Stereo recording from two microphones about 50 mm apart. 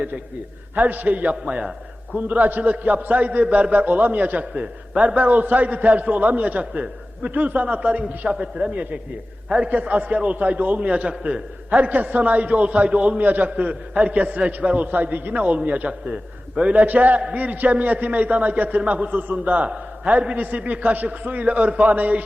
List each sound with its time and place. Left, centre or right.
0.8 s a man's voice: right